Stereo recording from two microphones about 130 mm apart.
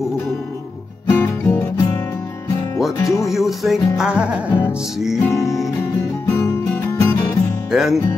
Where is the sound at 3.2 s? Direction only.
Centre (ahead or behind).